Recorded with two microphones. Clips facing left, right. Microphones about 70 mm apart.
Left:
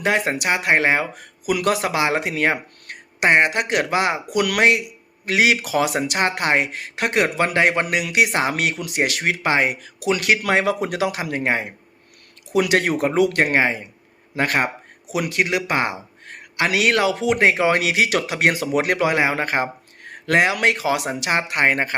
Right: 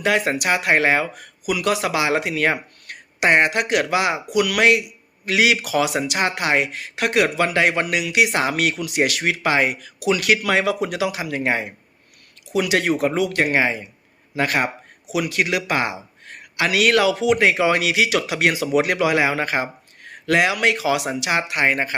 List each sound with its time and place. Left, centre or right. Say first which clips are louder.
0.0 s speech: right 1 dB; left
1.5 s a man's voice: even; left
12.5 s a man's voice: left 1 dB; left